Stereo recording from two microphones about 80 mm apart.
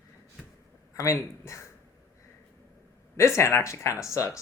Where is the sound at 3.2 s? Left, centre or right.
Left.